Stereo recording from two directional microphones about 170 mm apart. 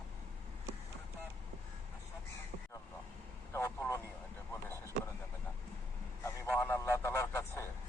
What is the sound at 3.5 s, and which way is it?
Vehicle, 15° left (ahead or behind).